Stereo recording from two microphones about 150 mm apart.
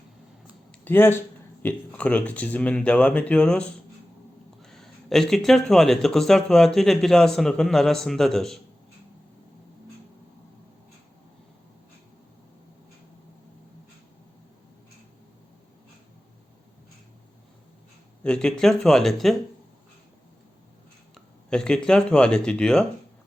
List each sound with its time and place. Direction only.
0.9 s speech: 15° left (ahead or behind)
18.2 s speech: 5° left (ahead or behind)
21.5 s speech: 5° left (ahead or behind)